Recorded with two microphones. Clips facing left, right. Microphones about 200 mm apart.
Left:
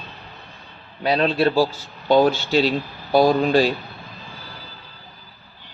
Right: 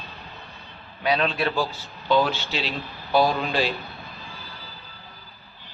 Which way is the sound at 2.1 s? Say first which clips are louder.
Left 6 dB; 45° left (ahead or behind).